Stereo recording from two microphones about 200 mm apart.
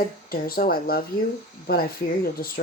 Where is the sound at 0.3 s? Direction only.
50° left (ahead or behind).